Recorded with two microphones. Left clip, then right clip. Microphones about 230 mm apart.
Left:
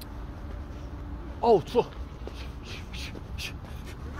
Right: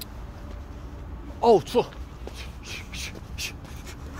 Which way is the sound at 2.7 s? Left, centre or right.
Right.